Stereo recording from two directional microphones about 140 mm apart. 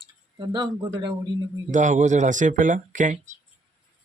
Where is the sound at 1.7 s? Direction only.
60° right (ahead or behind).